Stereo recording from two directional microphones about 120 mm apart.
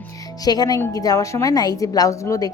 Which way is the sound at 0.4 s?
35° left (ahead or behind).